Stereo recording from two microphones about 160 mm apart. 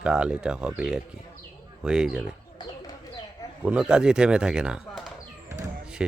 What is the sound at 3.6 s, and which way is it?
Speech, 5° right (ahead or behind).